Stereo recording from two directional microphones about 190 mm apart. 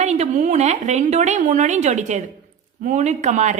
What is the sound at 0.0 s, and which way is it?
A woman's voice, 35° right (ahead or behind).